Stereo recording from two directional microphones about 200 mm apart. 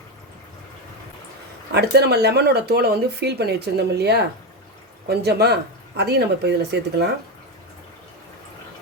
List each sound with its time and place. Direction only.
1.7 s speech: 55° right (ahead or behind)